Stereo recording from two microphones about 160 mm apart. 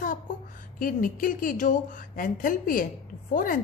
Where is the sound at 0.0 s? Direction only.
55° left (ahead or behind).